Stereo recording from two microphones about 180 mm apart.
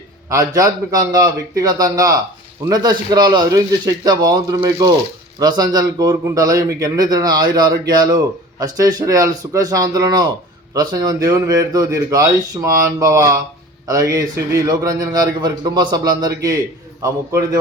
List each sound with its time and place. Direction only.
0.3 s speech: 15° right (ahead or behind)